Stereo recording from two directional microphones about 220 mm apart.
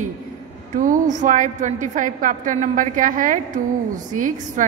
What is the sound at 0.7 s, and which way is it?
A woman's voice, 35° right (ahead or behind).